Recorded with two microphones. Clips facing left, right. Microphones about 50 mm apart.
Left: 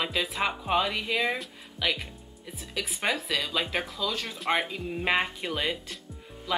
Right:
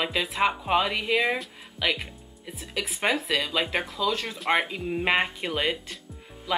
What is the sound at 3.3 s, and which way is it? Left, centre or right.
Speech, centre.